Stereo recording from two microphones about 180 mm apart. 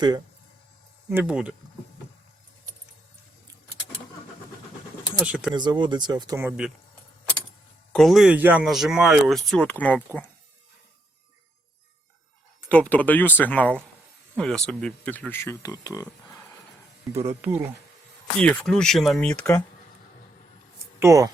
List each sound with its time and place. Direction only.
1.1 s speech: 5° right (ahead or behind)
5.2 s speech: 5° right (ahead or behind)
5.5 s speech: 25° right (ahead or behind)
7.9 s speech: centre (ahead or behind)
12.6 s speech: 10° left (ahead or behind)
17.1 s speech: 15° right (ahead or behind)
18.3 s speech: 5° left (ahead or behind)
21.0 s speech: 15° right (ahead or behind)